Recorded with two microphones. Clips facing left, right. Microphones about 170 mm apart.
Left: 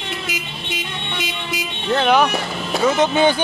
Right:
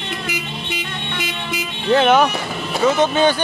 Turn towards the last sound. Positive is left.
turn(degrees=15)  # may be behind; listen again after turning